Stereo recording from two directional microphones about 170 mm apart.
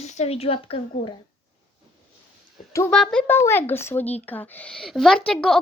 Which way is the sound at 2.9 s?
5° left (ahead or behind).